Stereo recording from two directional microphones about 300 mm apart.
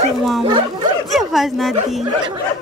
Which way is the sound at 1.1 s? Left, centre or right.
Centre.